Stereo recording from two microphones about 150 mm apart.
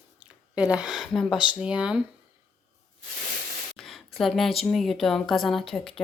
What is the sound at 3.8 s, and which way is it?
Speech, centre (ahead or behind).